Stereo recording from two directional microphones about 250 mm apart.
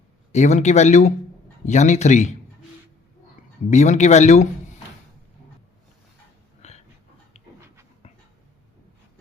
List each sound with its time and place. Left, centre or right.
0.3 s speech: left
3.7 s speech: left
6.6 s a sound: left
7.3 s dog: left